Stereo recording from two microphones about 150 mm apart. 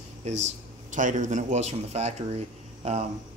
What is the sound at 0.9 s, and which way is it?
Speech, 55° right (ahead or behind).